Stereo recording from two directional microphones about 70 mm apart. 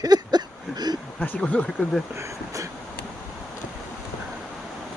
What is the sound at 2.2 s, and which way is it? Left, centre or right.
Speech, right.